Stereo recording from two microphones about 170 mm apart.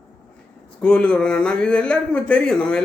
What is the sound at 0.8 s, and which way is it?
A man's voice, 5° left (ahead or behind).